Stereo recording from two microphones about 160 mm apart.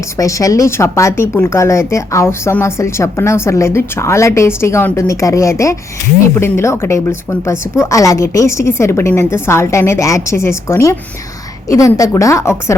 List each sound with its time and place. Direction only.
0.2 s a woman's voice: 20° left (ahead or behind)